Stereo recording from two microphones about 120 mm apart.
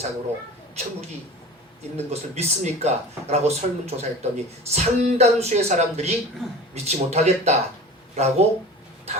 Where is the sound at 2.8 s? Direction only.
65° right (ahead or behind).